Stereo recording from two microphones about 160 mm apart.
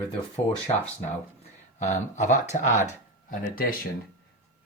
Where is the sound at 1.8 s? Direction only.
45° left (ahead or behind).